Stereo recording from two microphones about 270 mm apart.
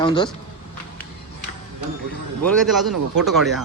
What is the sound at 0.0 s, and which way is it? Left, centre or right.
Speech, centre.